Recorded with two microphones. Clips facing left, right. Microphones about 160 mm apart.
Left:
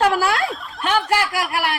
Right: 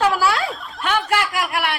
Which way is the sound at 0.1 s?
45° left (ahead or behind).